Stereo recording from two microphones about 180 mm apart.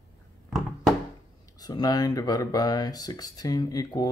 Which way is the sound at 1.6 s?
20° left (ahead or behind).